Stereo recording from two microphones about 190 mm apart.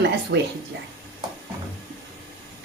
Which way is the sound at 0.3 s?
65° right (ahead or behind).